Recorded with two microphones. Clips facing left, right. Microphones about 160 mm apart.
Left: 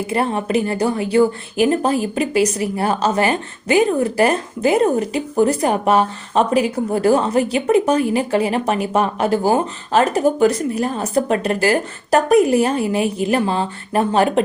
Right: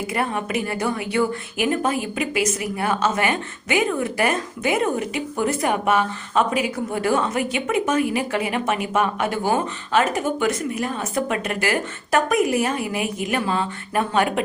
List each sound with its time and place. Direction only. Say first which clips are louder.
0.1 s a woman's voice: left 7 dB; 30° left (ahead or behind)